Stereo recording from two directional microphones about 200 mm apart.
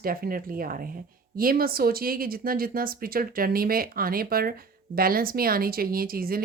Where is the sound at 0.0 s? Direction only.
45° right (ahead or behind).